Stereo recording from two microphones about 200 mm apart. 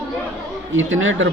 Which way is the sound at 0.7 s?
75° right (ahead or behind).